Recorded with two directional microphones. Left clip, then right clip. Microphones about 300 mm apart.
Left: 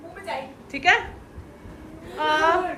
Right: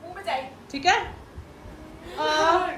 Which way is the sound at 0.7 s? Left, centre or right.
Centre.